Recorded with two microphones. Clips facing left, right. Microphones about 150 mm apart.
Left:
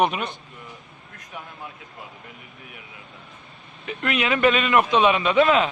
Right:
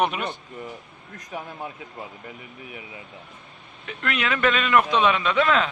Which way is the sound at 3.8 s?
10° left (ahead or behind).